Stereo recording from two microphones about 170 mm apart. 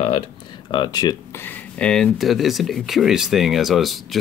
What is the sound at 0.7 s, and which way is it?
Speech, 25° left (ahead or behind).